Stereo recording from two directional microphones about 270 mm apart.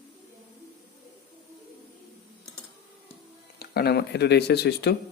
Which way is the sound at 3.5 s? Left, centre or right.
Left.